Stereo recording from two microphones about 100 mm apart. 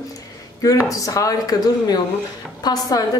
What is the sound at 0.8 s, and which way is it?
A woman's voice, 35° left (ahead or behind).